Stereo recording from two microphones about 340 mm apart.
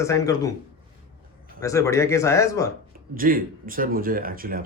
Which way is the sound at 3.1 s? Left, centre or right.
Right.